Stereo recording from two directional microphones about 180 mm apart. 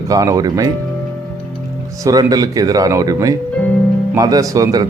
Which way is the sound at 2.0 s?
20° right (ahead or behind).